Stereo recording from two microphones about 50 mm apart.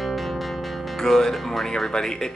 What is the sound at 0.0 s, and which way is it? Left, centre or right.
Speech, centre.